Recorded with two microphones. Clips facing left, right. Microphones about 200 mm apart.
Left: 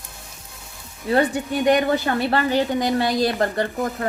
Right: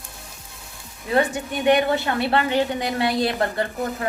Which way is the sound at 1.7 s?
40° left (ahead or behind).